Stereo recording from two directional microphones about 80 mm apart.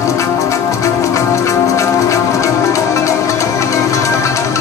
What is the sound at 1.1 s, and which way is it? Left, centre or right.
Music, left.